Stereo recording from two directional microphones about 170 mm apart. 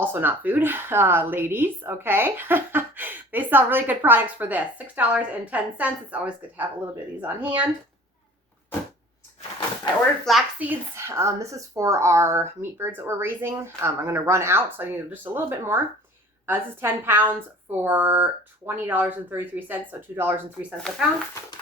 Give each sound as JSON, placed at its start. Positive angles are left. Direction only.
{"t": 0.0, "sound": "a woman's voice", "side_deg": -10}
{"t": 10.2, "sound": "speech", "side_deg": 0}
{"t": 10.7, "sound": "a woman's voice", "side_deg": -15}